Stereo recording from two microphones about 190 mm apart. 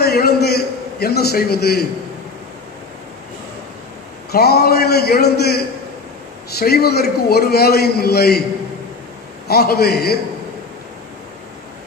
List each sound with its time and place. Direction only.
0.0 s a sound: 55° left (ahead or behind)
4.3 s a man's voice: 55° left (ahead or behind)
9.5 s a man's voice: 55° left (ahead or behind)